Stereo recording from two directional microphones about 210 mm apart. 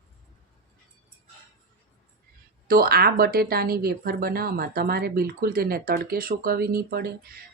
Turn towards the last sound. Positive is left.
turn(degrees=-45)  # may be behind; listen again after turning